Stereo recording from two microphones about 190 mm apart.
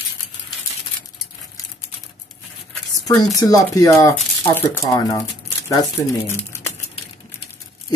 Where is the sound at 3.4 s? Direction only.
20° left (ahead or behind).